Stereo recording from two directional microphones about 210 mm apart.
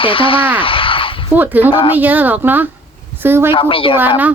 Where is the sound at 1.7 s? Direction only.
25° left (ahead or behind).